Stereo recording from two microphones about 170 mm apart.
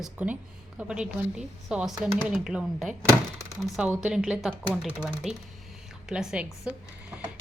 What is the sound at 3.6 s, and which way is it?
A woman's voice, 5° right (ahead or behind).